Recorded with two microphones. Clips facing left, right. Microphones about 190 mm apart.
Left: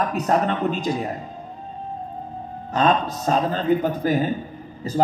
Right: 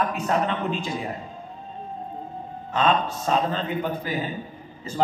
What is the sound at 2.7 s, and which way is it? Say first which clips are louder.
A man's voice: left 2 dB; 40° left (ahead or behind).